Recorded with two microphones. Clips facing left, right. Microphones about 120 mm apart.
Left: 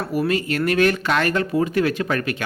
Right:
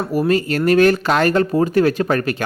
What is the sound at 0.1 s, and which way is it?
Speech, 40° right (ahead or behind).